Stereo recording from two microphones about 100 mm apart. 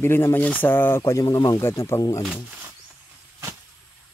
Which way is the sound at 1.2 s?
40° left (ahead or behind).